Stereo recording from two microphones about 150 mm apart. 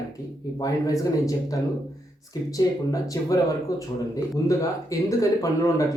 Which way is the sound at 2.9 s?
25° left (ahead or behind).